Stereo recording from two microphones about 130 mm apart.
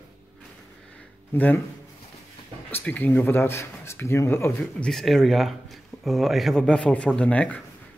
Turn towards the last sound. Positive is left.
turn(degrees=10)  # may be behind; listen again after turning